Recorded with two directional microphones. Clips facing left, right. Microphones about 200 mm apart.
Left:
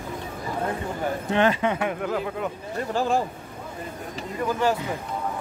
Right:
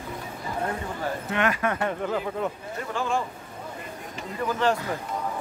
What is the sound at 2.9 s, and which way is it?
Speech, 35° left (ahead or behind).